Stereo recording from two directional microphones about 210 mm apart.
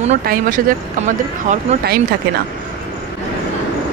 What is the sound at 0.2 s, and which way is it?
Speech, 45° right (ahead or behind).